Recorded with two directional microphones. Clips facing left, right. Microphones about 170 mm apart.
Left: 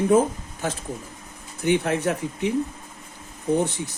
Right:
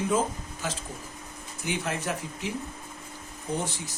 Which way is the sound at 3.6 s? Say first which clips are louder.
Left 9 dB; 60° left (ahead or behind).